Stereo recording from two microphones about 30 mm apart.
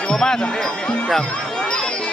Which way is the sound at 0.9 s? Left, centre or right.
Left.